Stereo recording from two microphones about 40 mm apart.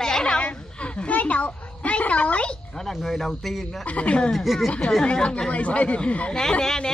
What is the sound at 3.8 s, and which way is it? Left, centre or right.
Speech, left.